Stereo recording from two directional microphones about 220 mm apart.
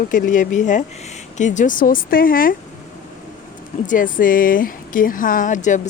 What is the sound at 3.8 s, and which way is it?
Speech, 35° left (ahead or behind).